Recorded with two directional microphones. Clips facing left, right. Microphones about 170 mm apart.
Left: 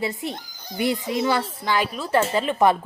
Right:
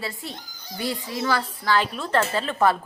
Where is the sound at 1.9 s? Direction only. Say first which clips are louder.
Left 2 dB; 5° left (ahead or behind).